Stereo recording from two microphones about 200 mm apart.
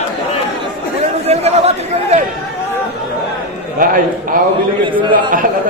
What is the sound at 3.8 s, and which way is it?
Speech, 45° right (ahead or behind).